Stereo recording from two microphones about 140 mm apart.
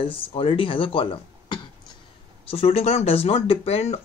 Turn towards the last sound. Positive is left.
turn(degrees=50)  # may be behind; listen again after turning